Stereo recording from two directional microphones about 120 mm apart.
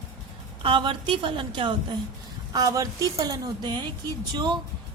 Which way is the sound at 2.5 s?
30° right (ahead or behind).